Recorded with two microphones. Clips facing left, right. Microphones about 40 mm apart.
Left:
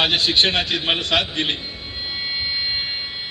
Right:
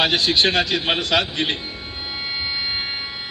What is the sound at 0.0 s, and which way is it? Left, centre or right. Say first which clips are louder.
A man's voice: even; centre.